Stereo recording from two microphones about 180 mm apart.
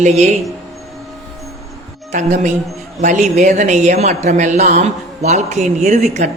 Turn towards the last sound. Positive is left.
turn(degrees=-40)  # may be behind; listen again after turning